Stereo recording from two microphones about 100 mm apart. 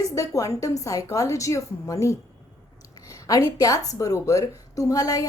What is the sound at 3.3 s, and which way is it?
A woman's voice, 35° left (ahead or behind).